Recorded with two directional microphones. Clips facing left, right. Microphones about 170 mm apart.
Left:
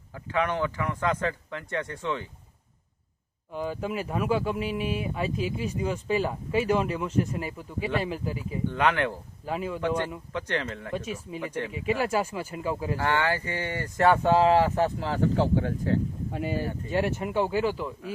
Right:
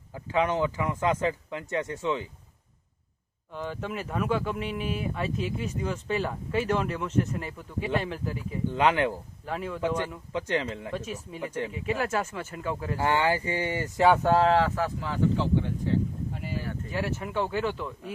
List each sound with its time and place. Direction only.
0.1 s speech: 15° right (ahead or behind)
3.5 s speech: 10° left (ahead or behind)
8.7 s speech: 15° right (ahead or behind)
9.5 s speech: 5° left (ahead or behind)
10.3 s speech: 10° right (ahead or behind)
10.9 s speech: 5° left (ahead or behind)
13.0 s speech: 15° right (ahead or behind); by 14.7 s 10° left (ahead or behind)
14.8 s speech: 35° left (ahead or behind); by 16.6 s 60° left (ahead or behind)
16.6 s speech: 30° left (ahead or behind)
17.2 s speech: 15° left (ahead or behind)